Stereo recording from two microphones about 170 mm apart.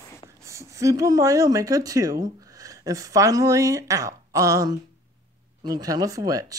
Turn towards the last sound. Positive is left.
turn(degrees=-20)  # may be behind; listen again after turning